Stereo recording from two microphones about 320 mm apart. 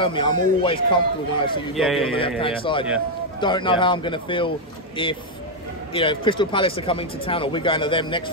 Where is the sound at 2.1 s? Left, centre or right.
Centre.